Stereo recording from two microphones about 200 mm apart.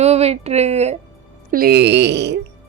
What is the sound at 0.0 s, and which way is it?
Speech, 30° right (ahead or behind).